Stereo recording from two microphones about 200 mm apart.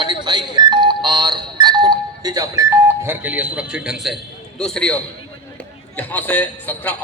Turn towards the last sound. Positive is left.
turn(degrees=5)  # may be behind; listen again after turning